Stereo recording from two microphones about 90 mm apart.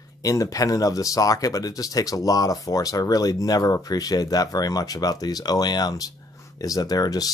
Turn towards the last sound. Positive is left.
turn(degrees=45)  # may be behind; listen again after turning